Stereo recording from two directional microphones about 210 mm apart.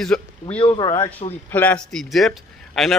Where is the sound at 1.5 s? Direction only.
10° left (ahead or behind).